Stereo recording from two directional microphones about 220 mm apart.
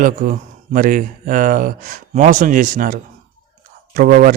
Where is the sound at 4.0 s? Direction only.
40° right (ahead or behind).